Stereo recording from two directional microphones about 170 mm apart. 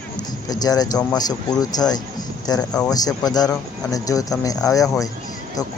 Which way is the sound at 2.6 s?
5° left (ahead or behind).